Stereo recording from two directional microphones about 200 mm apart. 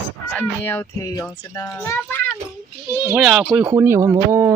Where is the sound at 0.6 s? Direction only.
10° left (ahead or behind).